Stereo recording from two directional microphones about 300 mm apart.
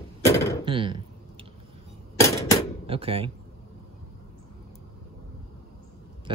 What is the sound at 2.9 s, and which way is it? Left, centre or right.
Speech, centre.